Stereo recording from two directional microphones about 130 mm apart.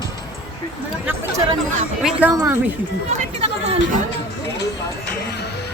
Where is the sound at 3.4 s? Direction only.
50° right (ahead or behind).